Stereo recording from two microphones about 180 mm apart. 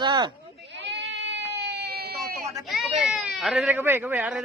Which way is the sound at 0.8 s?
75° right (ahead or behind).